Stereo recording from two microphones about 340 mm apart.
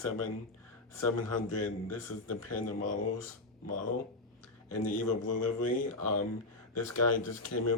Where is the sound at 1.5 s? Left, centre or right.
Left.